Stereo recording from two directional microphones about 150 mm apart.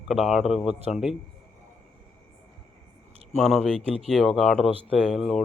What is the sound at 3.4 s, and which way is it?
Speech, centre (ahead or behind).